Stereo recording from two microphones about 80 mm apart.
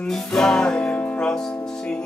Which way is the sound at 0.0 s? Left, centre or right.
Centre.